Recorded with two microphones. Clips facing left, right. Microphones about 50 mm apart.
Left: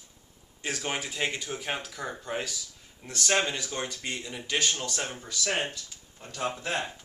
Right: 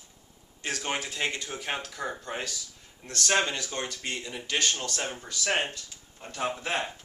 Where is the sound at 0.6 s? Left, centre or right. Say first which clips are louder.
Right 1 dB; centre.